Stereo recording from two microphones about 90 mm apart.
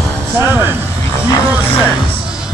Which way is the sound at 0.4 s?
25° right (ahead or behind).